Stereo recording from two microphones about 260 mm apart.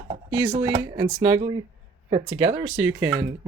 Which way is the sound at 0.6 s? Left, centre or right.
Centre.